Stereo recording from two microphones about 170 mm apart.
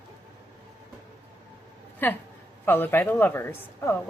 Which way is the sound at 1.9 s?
10° left (ahead or behind).